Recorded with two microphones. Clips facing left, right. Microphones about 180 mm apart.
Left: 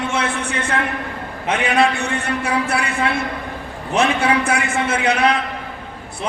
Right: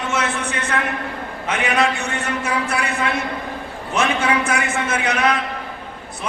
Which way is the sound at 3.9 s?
35° left (ahead or behind).